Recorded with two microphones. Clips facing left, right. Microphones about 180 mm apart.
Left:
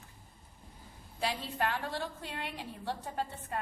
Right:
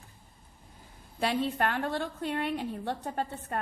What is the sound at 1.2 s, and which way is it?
A woman's voice, 60° right (ahead or behind).